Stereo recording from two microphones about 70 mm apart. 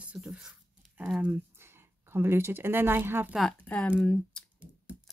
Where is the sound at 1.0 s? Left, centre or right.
Right.